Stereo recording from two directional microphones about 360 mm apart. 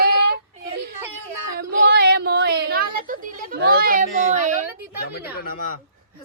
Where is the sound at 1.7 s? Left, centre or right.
Right.